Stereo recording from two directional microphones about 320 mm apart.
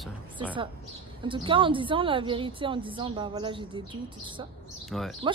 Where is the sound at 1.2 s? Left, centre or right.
Centre.